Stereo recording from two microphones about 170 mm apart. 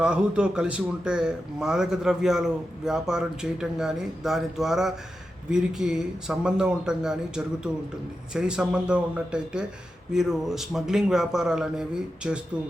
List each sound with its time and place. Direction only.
0.0 s speech: 5° right (ahead or behind)